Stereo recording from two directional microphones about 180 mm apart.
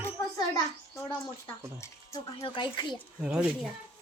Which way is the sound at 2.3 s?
25° left (ahead or behind).